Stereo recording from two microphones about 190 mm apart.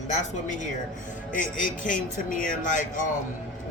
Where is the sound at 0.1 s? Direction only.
40° left (ahead or behind).